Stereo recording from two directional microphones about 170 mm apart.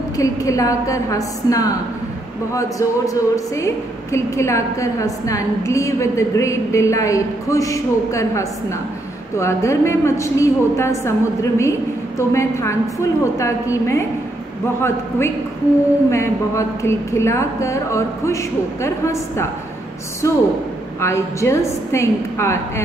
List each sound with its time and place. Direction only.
0.2 s a woman's voice: 20° left (ahead or behind)
3.1 s a woman's voice: 20° left (ahead or behind)